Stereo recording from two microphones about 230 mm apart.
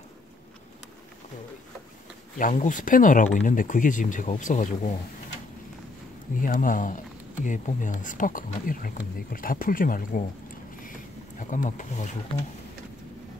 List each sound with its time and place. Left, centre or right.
2.3 s speech: left
6.4 s speech: left
10.8 s a sound: left